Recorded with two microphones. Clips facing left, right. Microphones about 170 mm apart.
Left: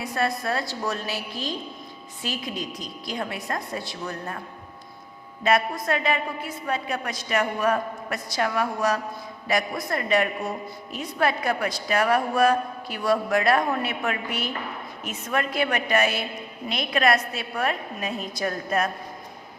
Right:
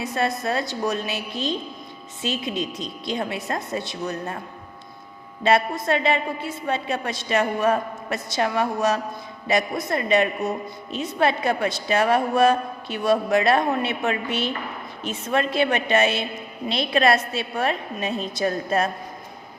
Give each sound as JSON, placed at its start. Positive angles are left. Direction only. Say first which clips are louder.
{"t": 0.0, "sound": "a woman's voice", "louder": "right 2 dB", "side_deg": -20}
{"t": 5.4, "sound": "a woman's voice", "louder": "right 3 dB", "side_deg": -25}